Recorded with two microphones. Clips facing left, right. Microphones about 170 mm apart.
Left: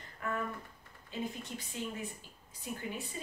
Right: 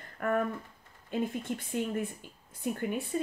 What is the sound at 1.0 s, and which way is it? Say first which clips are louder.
A woman's voice: right 8 dB; 55° right (ahead or behind).